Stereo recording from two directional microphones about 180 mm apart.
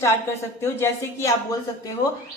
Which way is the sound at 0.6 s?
15° left (ahead or behind).